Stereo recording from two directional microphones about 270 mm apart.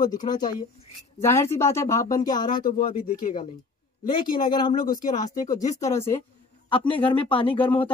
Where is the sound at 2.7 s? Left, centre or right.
Left.